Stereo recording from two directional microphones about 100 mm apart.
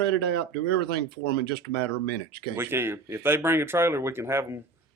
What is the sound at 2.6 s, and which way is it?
Speech, 25° right (ahead or behind).